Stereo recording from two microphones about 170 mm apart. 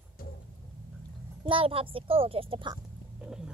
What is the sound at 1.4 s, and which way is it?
A child's voice, 30° right (ahead or behind).